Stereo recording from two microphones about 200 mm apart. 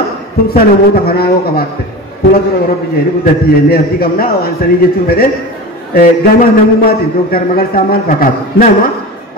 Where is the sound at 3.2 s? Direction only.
50° left (ahead or behind).